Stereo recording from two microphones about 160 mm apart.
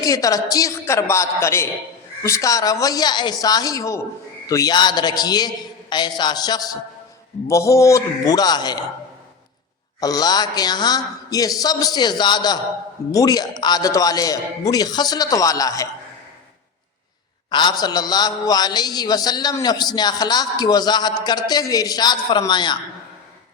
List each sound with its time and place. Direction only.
0.0 s a man's voice: 20° left (ahead or behind)
10.0 s a man's voice: 25° left (ahead or behind)
17.5 s a man's voice: 30° left (ahead or behind)